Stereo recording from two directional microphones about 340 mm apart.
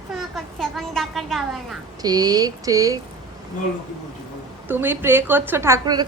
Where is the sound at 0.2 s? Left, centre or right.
Centre.